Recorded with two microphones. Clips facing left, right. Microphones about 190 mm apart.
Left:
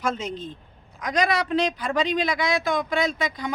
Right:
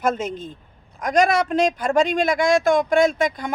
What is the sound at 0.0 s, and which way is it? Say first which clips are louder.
A man's voice: right 5 dB; 50° right (ahead or behind).